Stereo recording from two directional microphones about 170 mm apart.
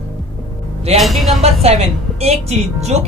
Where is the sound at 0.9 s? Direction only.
Centre (ahead or behind).